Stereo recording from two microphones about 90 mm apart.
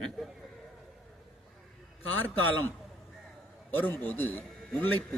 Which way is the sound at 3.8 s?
20° left (ahead or behind).